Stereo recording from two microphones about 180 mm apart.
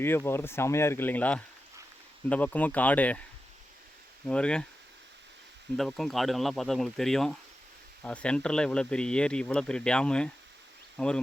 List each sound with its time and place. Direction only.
0.0 s speech: 10° left (ahead or behind)
4.3 s speech: 5° left (ahead or behind)
5.7 s speech: centre (ahead or behind)